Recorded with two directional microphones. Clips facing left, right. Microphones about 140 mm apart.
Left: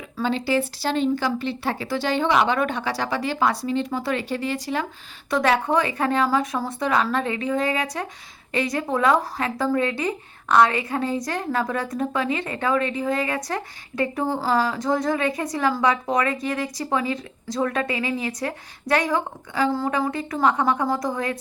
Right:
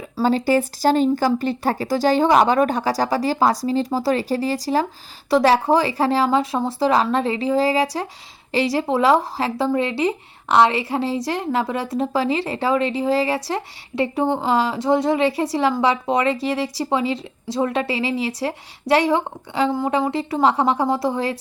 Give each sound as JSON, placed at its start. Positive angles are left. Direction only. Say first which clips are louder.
{"t": 0.2, "sound": "speech", "louder": "right 5 dB", "side_deg": -40}